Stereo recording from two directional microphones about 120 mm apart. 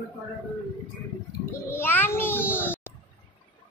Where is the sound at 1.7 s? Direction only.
15° left (ahead or behind).